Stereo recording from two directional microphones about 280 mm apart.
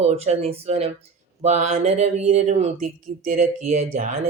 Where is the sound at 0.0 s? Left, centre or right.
Right.